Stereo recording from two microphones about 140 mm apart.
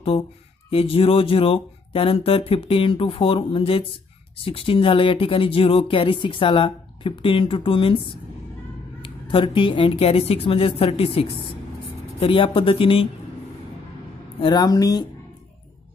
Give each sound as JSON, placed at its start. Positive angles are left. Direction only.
{"t": 0.7, "sound": "speech", "side_deg": 40}
{"t": 9.0, "sound": "a woman's voice", "side_deg": 35}
{"t": 14.4, "sound": "speech", "side_deg": 30}